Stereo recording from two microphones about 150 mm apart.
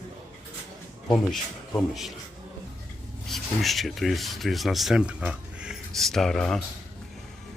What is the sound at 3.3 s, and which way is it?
Speech, centre (ahead or behind).